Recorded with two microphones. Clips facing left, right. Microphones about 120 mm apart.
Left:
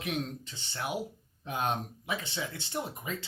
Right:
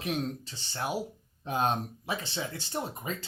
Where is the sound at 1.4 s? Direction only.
35° right (ahead or behind).